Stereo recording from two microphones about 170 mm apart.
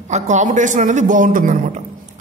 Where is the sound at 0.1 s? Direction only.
45° right (ahead or behind).